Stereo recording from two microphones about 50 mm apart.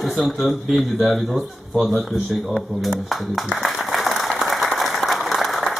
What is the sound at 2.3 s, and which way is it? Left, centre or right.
Speech, centre.